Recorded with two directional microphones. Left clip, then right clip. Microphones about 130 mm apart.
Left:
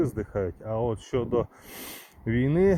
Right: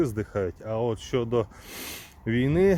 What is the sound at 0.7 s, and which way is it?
Speech, 20° right (ahead or behind).